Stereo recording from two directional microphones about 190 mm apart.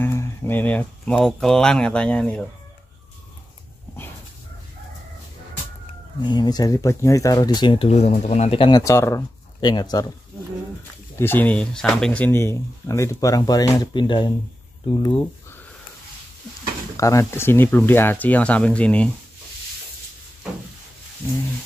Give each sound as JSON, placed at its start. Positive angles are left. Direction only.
{"t": 0.0, "sound": "speech", "side_deg": 15}
{"t": 6.2, "sound": "speech", "side_deg": 20}
{"t": 11.1, "sound": "speech", "side_deg": 10}
{"t": 16.9, "sound": "speech", "side_deg": 15}